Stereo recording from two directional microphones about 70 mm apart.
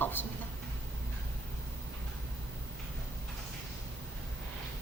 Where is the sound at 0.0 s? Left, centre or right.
Left.